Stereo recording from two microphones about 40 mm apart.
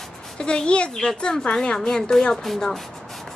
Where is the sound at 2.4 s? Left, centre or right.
Centre.